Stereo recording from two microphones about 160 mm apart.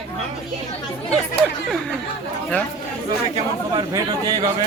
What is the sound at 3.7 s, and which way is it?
Speech, 25° right (ahead or behind).